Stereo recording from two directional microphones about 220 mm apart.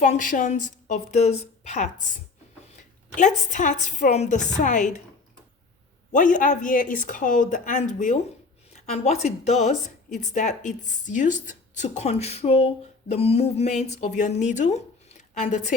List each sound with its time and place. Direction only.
0.0 s a woman's voice: 35° left (ahead or behind)
6.1 s a woman's voice: 35° left (ahead or behind)
8.7 s a sound: 30° left (ahead or behind)
9.2 s a woman's voice: 30° left (ahead or behind)